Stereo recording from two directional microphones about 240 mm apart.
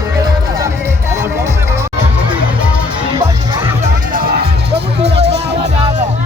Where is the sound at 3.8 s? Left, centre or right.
Right.